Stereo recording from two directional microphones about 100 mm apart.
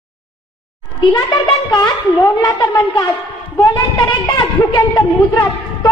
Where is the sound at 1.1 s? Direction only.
45° left (ahead or behind).